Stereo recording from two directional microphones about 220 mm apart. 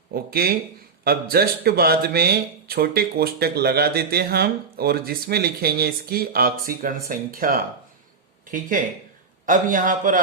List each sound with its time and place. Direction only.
0.1 s a man's voice: 45° right (ahead or behind)